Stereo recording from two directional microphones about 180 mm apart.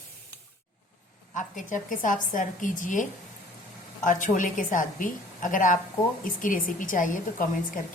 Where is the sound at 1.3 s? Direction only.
45° left (ahead or behind).